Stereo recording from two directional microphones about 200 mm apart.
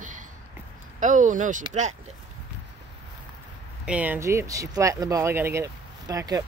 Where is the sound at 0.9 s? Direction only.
40° right (ahead or behind).